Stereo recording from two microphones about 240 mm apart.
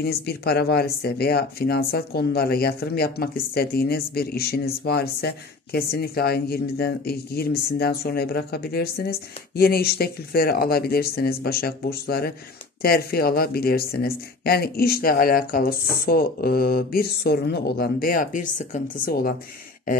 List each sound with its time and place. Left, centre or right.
0.0 s speech: left